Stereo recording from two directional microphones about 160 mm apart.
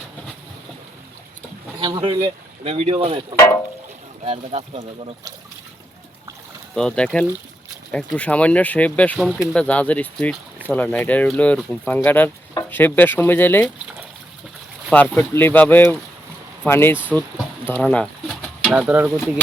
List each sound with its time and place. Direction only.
1.8 s speech: 30° right (ahead or behind)
6.7 s speech: 5° left (ahead or behind)
15.1 s speech: 15° left (ahead or behind)
17.2 s bird: 10° left (ahead or behind)
18.7 s mechanisms: 5° right (ahead or behind)